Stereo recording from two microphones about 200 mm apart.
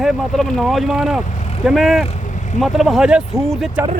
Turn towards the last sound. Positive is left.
turn(degrees=0)  # may be behind; listen again after turning